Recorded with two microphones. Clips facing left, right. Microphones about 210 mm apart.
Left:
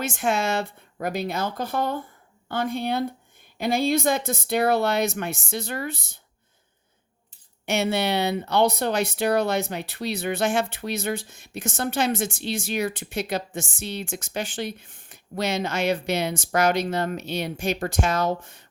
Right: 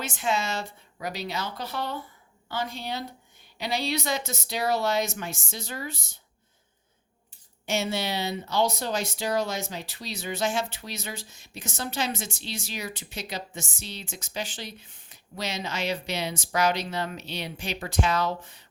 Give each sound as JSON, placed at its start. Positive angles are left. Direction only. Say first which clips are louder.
{"t": 0.0, "sound": "speech", "louder": "left 4 dB", "side_deg": 50}
{"t": 7.6, "sound": "speech", "louder": "left 5 dB", "side_deg": 60}